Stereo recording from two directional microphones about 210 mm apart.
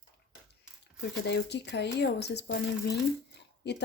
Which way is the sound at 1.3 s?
55° left (ahead or behind).